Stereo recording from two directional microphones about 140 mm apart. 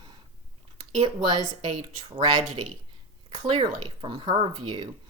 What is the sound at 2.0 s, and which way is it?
Speech, 35° right (ahead or behind).